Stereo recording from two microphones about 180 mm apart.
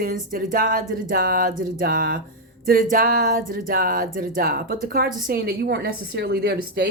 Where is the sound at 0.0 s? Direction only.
50° right (ahead or behind).